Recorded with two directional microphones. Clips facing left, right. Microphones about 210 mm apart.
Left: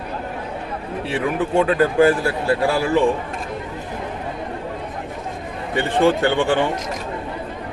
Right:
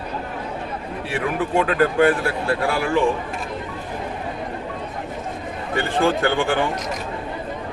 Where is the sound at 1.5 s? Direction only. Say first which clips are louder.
Left 2 dB; 25° left (ahead or behind).